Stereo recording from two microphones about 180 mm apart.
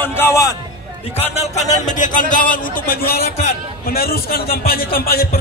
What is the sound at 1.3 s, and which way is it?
Speech, 40° left (ahead or behind).